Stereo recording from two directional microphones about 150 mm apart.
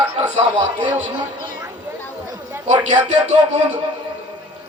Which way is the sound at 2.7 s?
50° right (ahead or behind).